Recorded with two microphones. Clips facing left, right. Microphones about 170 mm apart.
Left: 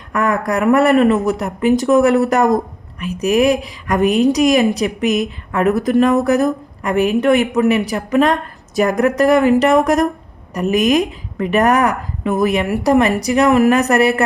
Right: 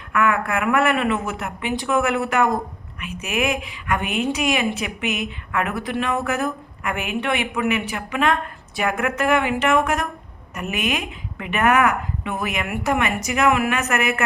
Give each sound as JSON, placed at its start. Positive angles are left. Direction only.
{"t": 0.1, "sound": "speech", "side_deg": 40}